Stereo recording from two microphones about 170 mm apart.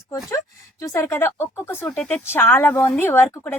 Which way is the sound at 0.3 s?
20° left (ahead or behind).